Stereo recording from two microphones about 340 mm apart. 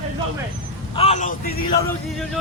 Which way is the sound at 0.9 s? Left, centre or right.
Centre.